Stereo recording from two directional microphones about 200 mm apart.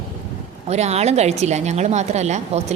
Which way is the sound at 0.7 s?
35° right (ahead or behind).